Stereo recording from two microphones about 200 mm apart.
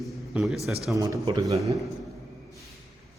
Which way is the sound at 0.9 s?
20° right (ahead or behind).